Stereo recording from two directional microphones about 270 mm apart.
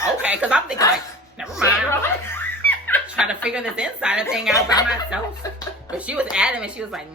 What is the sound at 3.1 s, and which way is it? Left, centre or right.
Speech, centre.